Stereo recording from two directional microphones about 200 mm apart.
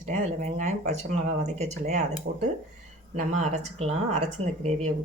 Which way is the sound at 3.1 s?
35° right (ahead or behind).